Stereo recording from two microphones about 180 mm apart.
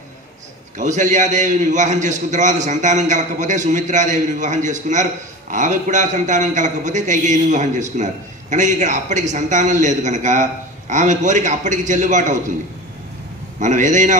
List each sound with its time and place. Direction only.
0.7 s a man's voice: 45° right (ahead or behind)
13.6 s a man's voice: 45° right (ahead or behind)